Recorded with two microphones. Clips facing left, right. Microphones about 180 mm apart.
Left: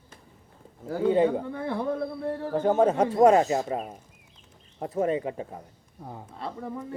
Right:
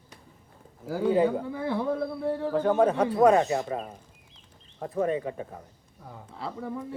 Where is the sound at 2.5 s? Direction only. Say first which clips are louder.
Left 1 dB; 25° left (ahead or behind).